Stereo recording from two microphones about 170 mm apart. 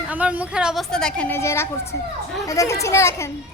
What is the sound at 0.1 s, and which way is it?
A woman's voice, 10° right (ahead or behind).